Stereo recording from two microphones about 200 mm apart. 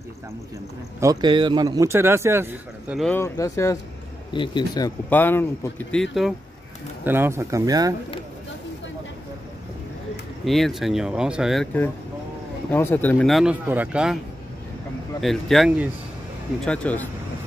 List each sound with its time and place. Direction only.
1.0 s a man's voice: 20° right (ahead or behind)
3.0 s speech: 10° left (ahead or behind)
7.1 s a man's voice: 10° right (ahead or behind)
10.4 s speech: centre (ahead or behind)
15.1 s speech: centre (ahead or behind)
16.6 s speech: 5° left (ahead or behind)